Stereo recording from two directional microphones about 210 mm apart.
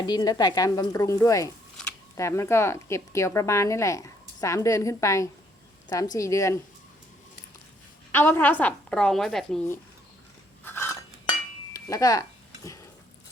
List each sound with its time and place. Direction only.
0.0 s speech: 20° left (ahead or behind)
8.1 s a woman's voice: 10° left (ahead or behind)
10.6 s biting: 10° left (ahead or behind)
11.7 s a sound: 15° left (ahead or behind)